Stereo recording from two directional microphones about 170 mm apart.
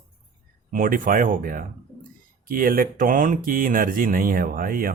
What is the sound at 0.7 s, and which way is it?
Speech, 55° right (ahead or behind).